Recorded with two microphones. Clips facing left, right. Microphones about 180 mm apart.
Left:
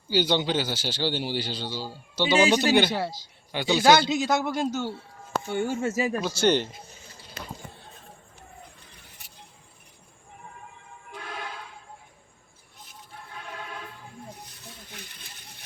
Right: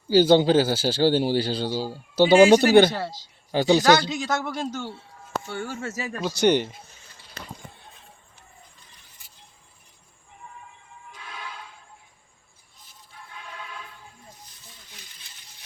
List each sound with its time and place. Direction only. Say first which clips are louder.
0.1 s a man's voice: right 8 dB; 40° right (ahead or behind)
3.5 s speech: right 6 dB; 40° right (ahead or behind)
3.8 s speech: even; 15° left (ahead or behind)
5.5 s speech: left 9 dB; 20° left (ahead or behind)
6.3 s speech: right 4 dB; 15° right (ahead or behind)
14.6 s a sound: left 7 dB; 60° left (ahead or behind)